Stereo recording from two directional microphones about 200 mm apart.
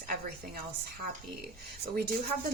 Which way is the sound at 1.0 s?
50° right (ahead or behind).